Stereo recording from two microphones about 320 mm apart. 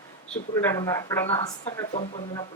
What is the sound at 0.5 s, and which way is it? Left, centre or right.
Speech, centre.